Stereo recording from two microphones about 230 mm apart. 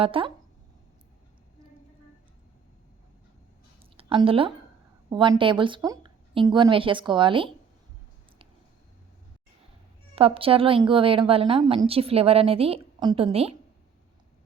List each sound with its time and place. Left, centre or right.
0.0 s a woman's voice: right
3.9 s a woman's voice: right
10.2 s a woman's voice: right